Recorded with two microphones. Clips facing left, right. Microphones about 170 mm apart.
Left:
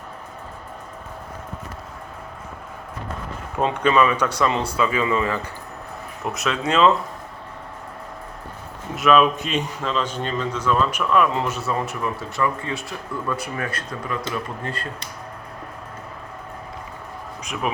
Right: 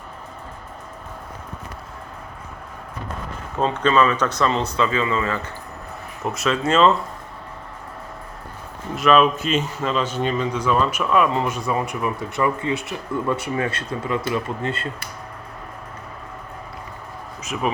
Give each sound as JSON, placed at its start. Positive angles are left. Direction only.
{"t": 3.6, "sound": "speech", "side_deg": 15}
{"t": 6.3, "sound": "speech", "side_deg": 0}
{"t": 9.0, "sound": "a man's voice", "side_deg": 0}
{"t": 17.4, "sound": "music", "side_deg": -5}